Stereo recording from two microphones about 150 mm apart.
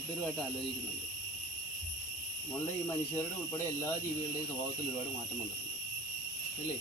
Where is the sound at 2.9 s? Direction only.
20° left (ahead or behind).